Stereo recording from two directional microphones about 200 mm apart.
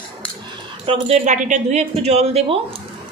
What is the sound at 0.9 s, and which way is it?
Speech, 35° right (ahead or behind).